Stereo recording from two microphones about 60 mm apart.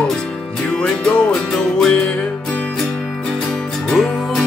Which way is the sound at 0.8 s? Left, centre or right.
Centre.